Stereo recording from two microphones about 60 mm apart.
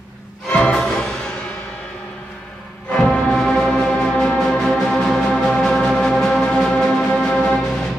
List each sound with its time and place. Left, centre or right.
0.5 s music: centre
2.9 s music: centre